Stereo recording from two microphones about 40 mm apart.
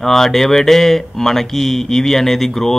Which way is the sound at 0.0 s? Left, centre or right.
Centre.